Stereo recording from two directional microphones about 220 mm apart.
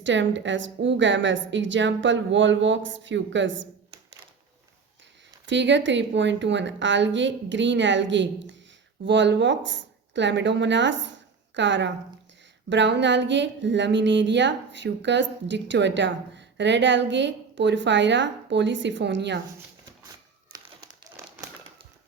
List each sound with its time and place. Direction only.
0.0 s a woman's voice: 55° right (ahead or behind)
5.5 s a woman's voice: 55° right (ahead or behind)
12.6 s a sound: 55° right (ahead or behind)